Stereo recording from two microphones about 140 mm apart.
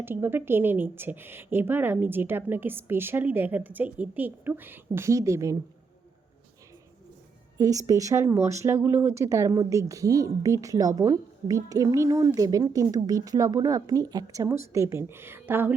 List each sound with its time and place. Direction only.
0.0 s a woman's voice: 15° right (ahead or behind)
7.6 s a woman's voice: 25° right (ahead or behind)